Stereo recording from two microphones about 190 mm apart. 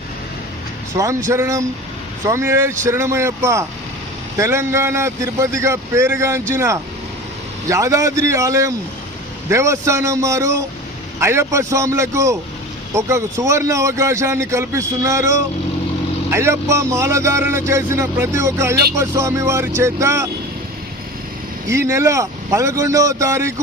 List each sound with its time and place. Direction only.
0.9 s speech: 15° right (ahead or behind)
21.7 s speech: 15° right (ahead or behind)